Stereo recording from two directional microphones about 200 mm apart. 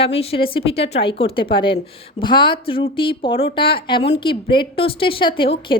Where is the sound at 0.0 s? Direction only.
30° left (ahead or behind).